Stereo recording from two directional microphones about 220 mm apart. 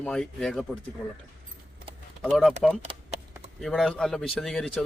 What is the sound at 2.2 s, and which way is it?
Speech, centre (ahead or behind).